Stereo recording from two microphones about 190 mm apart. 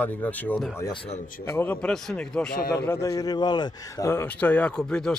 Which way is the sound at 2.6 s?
20° left (ahead or behind).